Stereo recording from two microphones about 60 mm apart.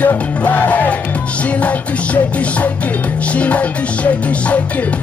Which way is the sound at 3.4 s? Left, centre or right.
Left.